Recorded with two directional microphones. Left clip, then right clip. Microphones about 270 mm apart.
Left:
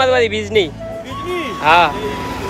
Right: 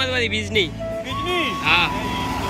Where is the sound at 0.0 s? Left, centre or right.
Centre.